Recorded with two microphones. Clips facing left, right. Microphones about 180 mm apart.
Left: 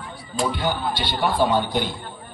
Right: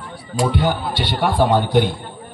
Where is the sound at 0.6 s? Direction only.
70° right (ahead or behind).